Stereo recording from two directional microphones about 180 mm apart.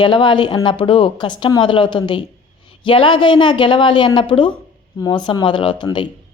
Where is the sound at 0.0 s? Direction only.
25° left (ahead or behind).